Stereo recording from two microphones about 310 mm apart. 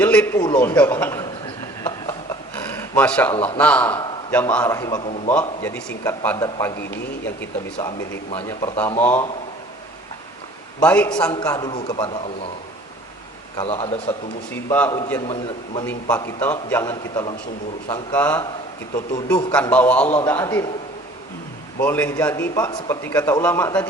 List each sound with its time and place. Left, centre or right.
0.0 s a man's voice: centre
2.7 s a sound: centre
3.6 s a man's voice: centre
5.3 s a man's voice: centre
7.8 s a man's voice: centre
10.8 s a man's voice: centre
13.6 s a man's voice: centre
21.8 s a man's voice: centre